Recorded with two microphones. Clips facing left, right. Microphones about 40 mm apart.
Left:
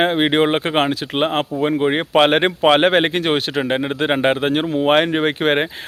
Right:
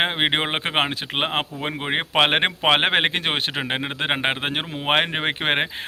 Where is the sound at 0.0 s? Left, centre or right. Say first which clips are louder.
Left 6 dB; centre.